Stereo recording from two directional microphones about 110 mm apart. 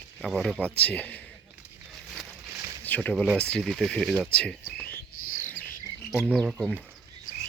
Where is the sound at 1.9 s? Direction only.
5° right (ahead or behind).